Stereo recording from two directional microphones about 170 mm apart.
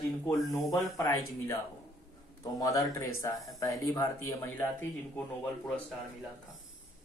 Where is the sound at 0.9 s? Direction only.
20° left (ahead or behind).